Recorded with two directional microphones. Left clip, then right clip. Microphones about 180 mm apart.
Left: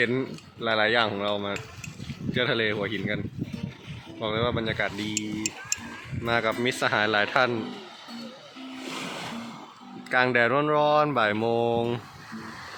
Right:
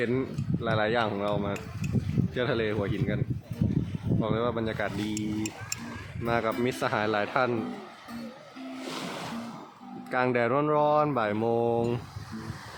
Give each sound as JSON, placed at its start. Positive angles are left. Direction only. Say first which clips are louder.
{"t": 0.0, "sound": "speech", "louder": "left 3 dB", "side_deg": 0}
{"t": 4.2, "sound": "speech", "louder": "left 2 dB", "side_deg": -5}
{"t": 5.1, "sound": "speech", "louder": "left 2 dB", "side_deg": -65}
{"t": 6.2, "sound": "speech", "louder": "left 3 dB", "side_deg": -5}
{"t": 10.1, "sound": "speech", "louder": "left 4 dB", "side_deg": 0}